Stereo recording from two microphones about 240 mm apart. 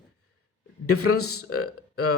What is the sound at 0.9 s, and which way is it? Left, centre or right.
Speech, left.